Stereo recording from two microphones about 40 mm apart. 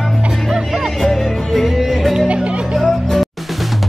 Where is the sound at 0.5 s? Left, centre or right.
Centre.